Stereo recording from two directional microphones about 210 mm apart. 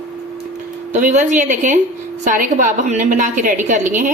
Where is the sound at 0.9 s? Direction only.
35° right (ahead or behind).